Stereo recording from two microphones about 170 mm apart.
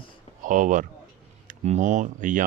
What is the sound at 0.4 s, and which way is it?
Speech, 50° right (ahead or behind).